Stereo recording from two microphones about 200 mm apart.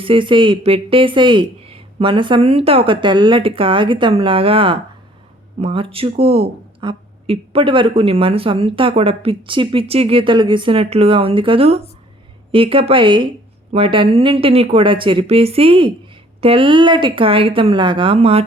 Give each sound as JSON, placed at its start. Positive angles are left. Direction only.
{"t": 0.0, "sound": "speech", "side_deg": -25}